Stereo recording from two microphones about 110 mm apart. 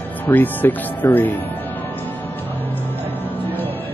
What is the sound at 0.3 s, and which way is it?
Speech, 15° left (ahead or behind).